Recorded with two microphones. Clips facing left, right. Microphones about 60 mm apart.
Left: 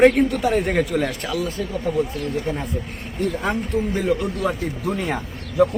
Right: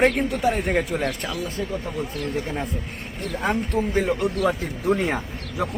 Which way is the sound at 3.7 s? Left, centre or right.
Right.